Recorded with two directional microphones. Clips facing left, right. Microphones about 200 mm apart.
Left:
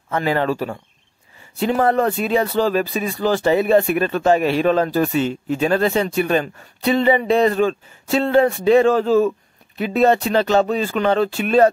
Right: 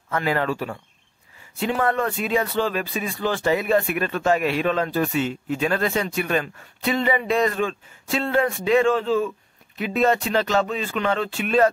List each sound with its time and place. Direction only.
0.1 s speech: 30° left (ahead or behind)